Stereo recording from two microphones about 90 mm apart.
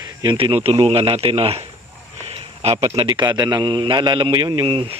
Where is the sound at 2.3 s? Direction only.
90° right.